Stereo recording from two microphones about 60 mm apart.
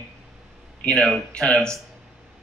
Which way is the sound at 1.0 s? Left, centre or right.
Centre.